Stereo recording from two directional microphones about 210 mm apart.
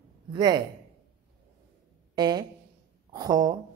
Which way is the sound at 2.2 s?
20° right (ahead or behind).